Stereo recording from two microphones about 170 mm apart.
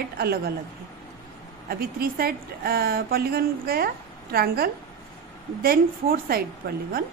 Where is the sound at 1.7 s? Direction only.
60° right (ahead or behind).